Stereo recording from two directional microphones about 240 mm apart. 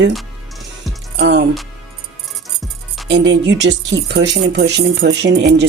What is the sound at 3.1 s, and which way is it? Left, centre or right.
Speech, right.